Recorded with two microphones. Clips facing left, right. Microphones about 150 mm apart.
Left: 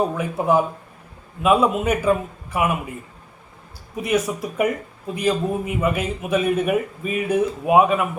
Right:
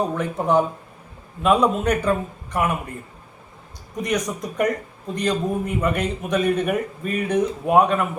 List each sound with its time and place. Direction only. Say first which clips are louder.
0.2 s a man's voice: even; 5° left (ahead or behind)
3.9 s a man's voice: left 3 dB; 5° left (ahead or behind)